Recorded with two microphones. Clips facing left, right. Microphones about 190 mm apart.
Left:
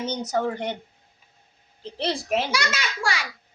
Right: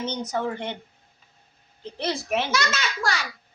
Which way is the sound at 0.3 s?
40° left (ahead or behind).